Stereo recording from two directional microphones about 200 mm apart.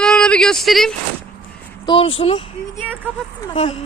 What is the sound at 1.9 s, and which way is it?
Speech, 25° left (ahead or behind).